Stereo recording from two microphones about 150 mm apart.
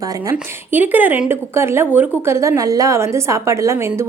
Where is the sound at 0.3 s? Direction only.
10° right (ahead or behind).